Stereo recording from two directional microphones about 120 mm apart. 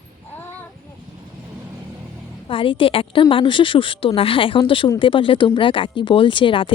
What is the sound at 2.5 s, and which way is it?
Speech, 45° left (ahead or behind).